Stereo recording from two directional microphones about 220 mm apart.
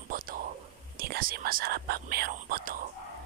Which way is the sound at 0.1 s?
40° right (ahead or behind).